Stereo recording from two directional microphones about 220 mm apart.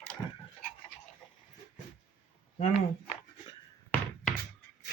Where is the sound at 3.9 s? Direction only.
5° left (ahead or behind).